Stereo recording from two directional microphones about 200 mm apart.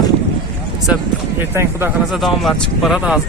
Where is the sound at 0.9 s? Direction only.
5° right (ahead or behind).